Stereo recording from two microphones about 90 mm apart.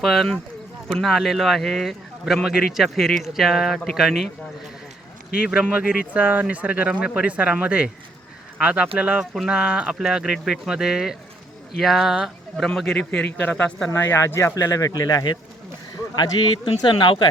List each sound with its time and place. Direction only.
0.0 s a man's voice: centre (ahead or behind)
5.4 s a man's voice: 10° right (ahead or behind); by 13.7 s 20° left (ahead or behind)
13.9 s speech: 30° left (ahead or behind)
14.5 s speech: 45° left (ahead or behind)
16.6 s speech: 65° left (ahead or behind)